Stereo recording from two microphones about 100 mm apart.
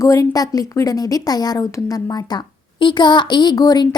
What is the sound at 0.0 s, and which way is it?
A woman's voice, 35° left (ahead or behind).